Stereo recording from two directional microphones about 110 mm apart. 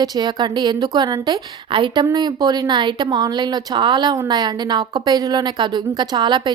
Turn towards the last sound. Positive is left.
turn(degrees=-45)  # may be behind; listen again after turning